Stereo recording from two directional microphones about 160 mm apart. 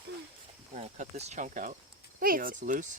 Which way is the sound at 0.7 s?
45° right (ahead or behind).